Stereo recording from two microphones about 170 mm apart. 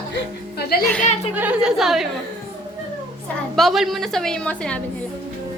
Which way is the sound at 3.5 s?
Centre (ahead or behind).